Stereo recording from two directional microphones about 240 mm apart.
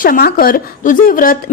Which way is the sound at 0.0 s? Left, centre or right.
Left.